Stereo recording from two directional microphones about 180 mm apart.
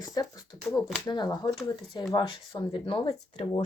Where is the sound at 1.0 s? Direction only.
25° left (ahead or behind).